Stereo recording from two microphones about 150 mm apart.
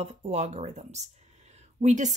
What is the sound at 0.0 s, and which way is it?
Speech, 45° right (ahead or behind).